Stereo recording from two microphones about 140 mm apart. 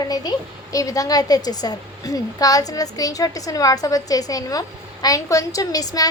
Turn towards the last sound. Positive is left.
turn(degrees=25)  # may be behind; listen again after turning